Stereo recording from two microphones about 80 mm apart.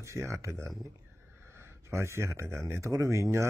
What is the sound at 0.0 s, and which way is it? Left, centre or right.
Speech, right.